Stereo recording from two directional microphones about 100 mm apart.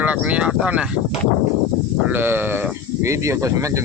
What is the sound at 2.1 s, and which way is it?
Speech, 20° right (ahead or behind).